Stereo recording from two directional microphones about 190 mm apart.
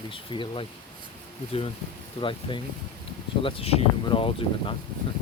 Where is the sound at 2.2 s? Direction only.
25° left (ahead or behind).